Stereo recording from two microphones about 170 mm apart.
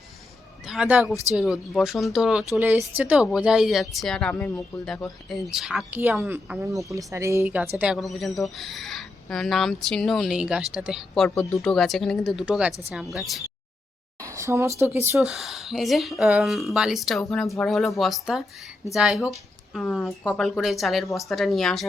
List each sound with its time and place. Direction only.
0.6 s a woman's voice: 5° right (ahead or behind)
14.2 s a sound: 20° right (ahead or behind)
15.3 s speech: centre (ahead or behind)